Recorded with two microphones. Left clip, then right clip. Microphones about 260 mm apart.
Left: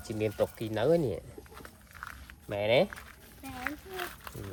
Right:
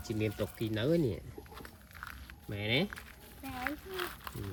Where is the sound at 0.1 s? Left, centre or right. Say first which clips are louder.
Left 6 dB; left.